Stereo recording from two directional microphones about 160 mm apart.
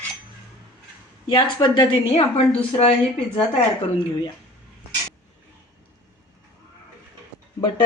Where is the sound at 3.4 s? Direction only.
35° left (ahead or behind).